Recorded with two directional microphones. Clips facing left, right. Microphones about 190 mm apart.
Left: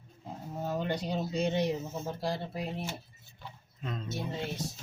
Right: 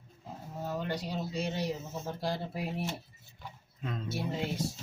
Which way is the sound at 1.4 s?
20° left (ahead or behind).